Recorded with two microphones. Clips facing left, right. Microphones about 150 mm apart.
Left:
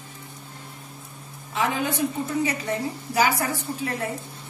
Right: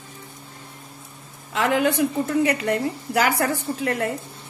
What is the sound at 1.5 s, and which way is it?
A woman's voice, 65° right (ahead or behind).